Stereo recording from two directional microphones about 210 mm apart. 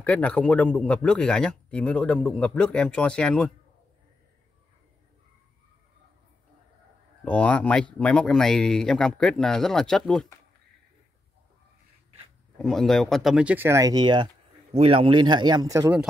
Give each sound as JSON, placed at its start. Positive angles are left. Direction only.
{"t": 0.0, "sound": "a man's voice", "side_deg": 5}
{"t": 7.2, "sound": "a man's voice", "side_deg": 5}
{"t": 12.5, "sound": "speech", "side_deg": 0}